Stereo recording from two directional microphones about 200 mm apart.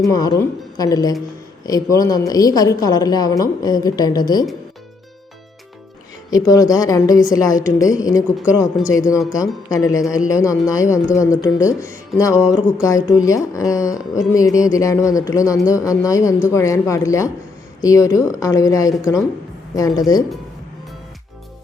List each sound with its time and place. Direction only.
0.0 s a woman's voice: 20° left (ahead or behind)
6.3 s a woman's voice: 15° left (ahead or behind)